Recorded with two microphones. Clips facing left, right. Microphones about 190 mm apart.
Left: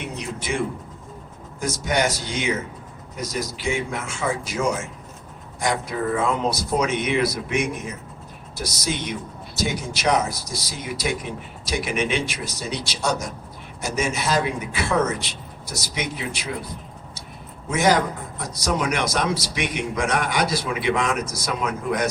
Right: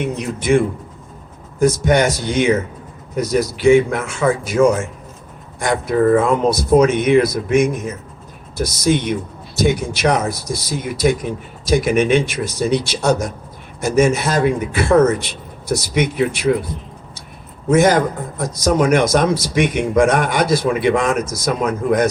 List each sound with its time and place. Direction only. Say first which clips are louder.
0.0 s a man's voice: right 9 dB; 55° right (ahead or behind)
17.7 s a man's voice: right 7 dB; 50° right (ahead or behind)